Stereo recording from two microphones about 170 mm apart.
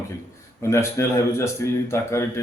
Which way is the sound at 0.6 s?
15° left (ahead or behind).